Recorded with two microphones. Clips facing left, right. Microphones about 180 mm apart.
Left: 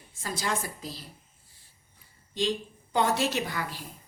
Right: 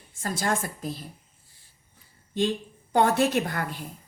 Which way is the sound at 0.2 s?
50° right (ahead or behind).